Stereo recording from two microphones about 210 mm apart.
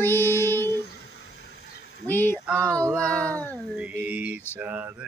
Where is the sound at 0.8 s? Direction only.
50° left (ahead or behind).